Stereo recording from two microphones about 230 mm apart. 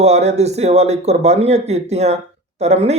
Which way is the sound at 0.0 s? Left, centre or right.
Right.